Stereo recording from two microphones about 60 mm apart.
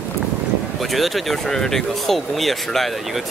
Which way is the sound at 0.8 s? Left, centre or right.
Centre.